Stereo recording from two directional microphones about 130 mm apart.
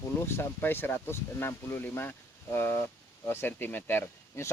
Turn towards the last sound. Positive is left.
turn(degrees=15)  # may be behind; listen again after turning